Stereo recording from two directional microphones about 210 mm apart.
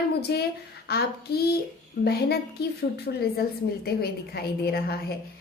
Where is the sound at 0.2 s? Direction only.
50° left (ahead or behind).